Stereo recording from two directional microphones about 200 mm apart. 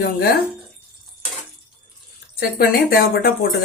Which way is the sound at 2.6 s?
50° left (ahead or behind).